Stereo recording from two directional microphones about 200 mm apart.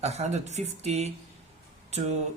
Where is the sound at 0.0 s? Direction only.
35° right (ahead or behind).